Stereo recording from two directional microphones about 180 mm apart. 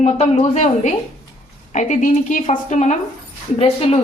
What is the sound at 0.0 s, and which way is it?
A woman's voice, 35° left (ahead or behind).